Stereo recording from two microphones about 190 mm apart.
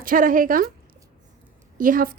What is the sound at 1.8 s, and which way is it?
Speech, 45° right (ahead or behind).